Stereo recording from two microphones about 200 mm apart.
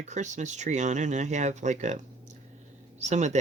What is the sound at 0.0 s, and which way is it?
Speech, 35° right (ahead or behind).